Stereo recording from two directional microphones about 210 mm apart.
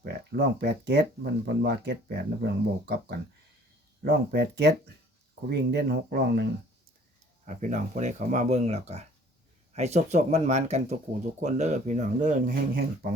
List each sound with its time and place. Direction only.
0.0 s speech: 50° right (ahead or behind)
4.0 s speech: 50° right (ahead or behind)
7.4 s speech: 35° right (ahead or behind)